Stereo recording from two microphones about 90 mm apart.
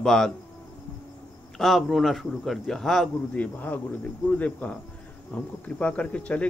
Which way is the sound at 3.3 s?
20° left (ahead or behind).